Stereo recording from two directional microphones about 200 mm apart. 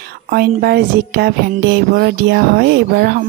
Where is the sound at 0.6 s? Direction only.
50° right (ahead or behind).